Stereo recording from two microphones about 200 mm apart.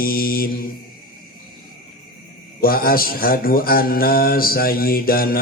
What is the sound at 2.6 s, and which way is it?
Mantra, 50° left (ahead or behind).